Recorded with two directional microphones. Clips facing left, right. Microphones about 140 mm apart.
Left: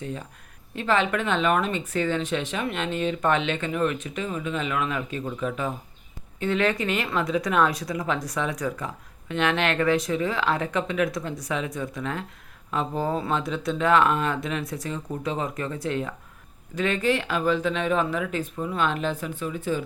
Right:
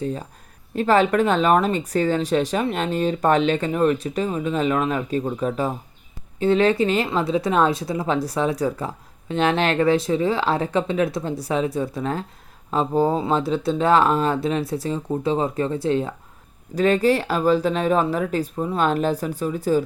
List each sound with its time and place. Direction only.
0.0 s speech: 35° right (ahead or behind)